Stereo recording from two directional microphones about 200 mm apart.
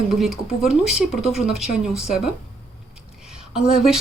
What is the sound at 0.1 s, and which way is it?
Speech, centre (ahead or behind).